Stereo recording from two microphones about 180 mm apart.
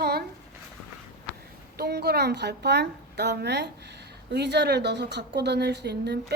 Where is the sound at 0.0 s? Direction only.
60° right (ahead or behind).